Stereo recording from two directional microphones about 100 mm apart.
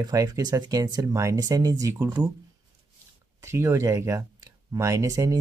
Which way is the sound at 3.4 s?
30° right (ahead or behind).